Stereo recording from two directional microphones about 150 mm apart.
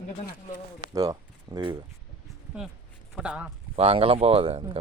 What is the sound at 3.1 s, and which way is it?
Speech, 5° right (ahead or behind).